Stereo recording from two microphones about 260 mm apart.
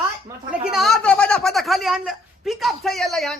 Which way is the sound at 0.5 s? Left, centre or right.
Centre.